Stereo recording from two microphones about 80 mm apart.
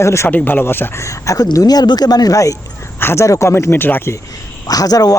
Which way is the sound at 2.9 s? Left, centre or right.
Left.